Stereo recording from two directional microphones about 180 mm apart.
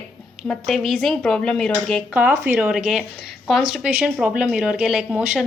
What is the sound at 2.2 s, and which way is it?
Speech, 5° right (ahead or behind).